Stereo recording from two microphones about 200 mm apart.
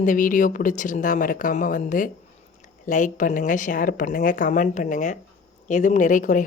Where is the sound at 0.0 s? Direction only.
40° left (ahead or behind).